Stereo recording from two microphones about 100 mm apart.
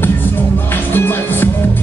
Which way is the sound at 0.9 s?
20° left (ahead or behind).